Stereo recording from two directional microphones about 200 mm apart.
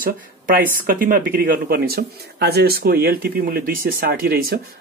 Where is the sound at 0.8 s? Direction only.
45° right (ahead or behind).